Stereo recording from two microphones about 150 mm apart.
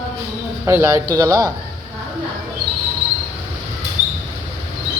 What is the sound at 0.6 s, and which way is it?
Speech, 15° right (ahead or behind).